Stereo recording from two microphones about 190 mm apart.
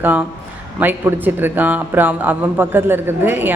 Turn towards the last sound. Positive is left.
turn(degrees=-10)  # may be behind; listen again after turning